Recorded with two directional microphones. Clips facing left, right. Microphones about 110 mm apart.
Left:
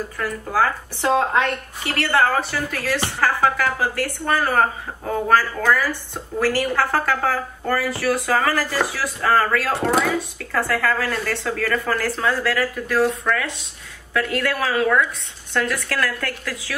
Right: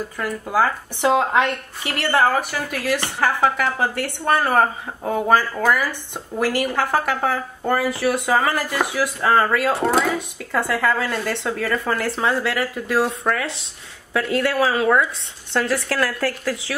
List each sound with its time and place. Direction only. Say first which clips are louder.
0.2 s a woman's voice: right 1 dB; 15° right (ahead or behind)
13.2 s a woman's voice: right 1 dB; 35° right (ahead or behind)